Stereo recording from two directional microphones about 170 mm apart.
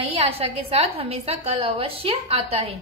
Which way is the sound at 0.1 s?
35° right (ahead or behind).